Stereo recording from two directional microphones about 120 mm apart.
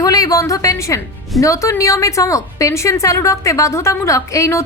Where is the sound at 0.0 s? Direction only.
30° left (ahead or behind).